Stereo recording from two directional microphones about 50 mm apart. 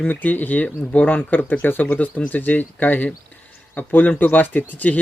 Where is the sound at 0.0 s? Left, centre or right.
Left.